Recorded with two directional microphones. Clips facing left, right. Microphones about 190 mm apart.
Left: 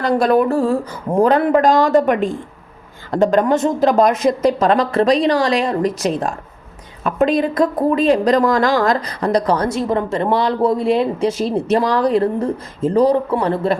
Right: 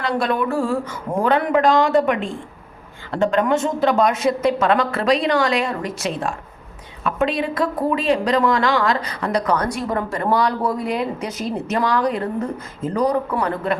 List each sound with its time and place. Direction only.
0.0 s speech: 40° left (ahead or behind)